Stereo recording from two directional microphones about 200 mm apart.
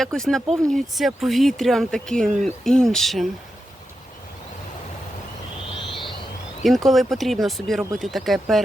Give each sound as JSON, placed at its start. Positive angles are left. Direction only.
{"t": 0.0, "sound": "speech", "side_deg": 0}
{"t": 6.6, "sound": "speech", "side_deg": 0}